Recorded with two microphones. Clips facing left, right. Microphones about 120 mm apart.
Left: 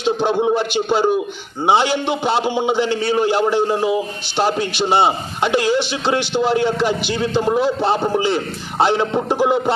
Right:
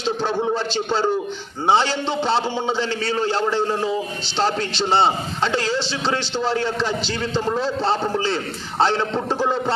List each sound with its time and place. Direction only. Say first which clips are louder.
0.0 s a man's voice: left 5 dB; 15° left (ahead or behind)